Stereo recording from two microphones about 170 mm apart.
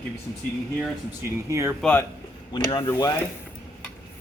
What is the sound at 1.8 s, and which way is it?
Speech, 10° left (ahead or behind).